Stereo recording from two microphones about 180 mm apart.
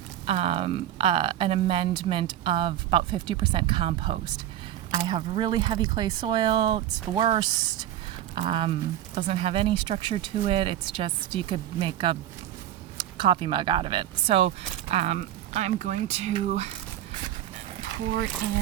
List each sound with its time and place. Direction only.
0.3 s speech: 30° right (ahead or behind)